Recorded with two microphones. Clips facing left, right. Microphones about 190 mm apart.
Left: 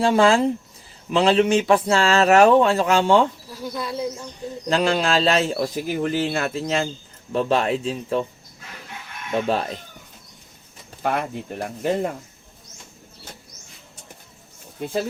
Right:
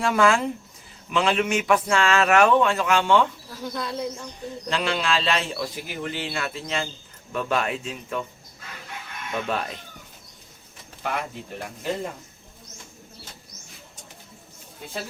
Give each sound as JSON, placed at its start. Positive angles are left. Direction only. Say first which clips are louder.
{"t": 0.0, "sound": "speech", "louder": "left 4 dB", "side_deg": 30}
{"t": 3.6, "sound": "speech", "louder": "left 2 dB", "side_deg": 10}
{"t": 4.7, "sound": "speech", "louder": "left 6 dB", "side_deg": 40}
{"t": 9.3, "sound": "speech", "louder": "left 6 dB", "side_deg": 30}
{"t": 11.6, "sound": "speech", "louder": "left 6 dB", "side_deg": 55}